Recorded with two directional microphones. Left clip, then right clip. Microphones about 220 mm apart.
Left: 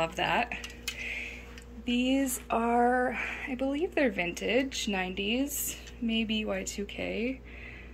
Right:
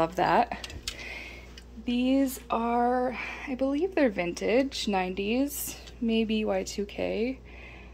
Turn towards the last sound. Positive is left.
turn(degrees=-15)  # may be behind; listen again after turning